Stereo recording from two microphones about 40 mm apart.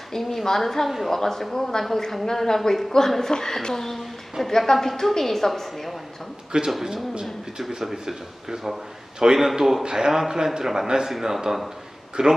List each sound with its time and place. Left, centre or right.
0.1 s a woman's voice: centre
0.9 s a man's voice: centre
1.1 s a woman's voice: centre
6.5 s speech: right
7.7 s a man's voice: centre
9.8 s a man's voice: centre